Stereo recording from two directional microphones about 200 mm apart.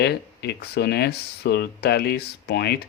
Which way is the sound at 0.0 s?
55° left (ahead or behind).